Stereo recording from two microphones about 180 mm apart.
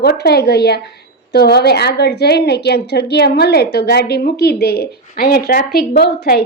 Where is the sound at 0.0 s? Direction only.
65° left (ahead or behind).